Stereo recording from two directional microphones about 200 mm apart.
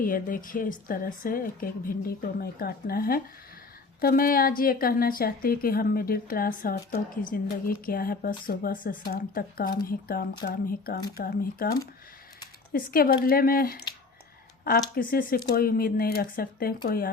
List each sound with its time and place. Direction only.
0.0 s a woman's voice: 40° left (ahead or behind)